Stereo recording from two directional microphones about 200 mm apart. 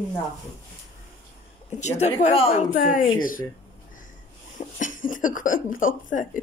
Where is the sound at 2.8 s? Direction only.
45° left (ahead or behind).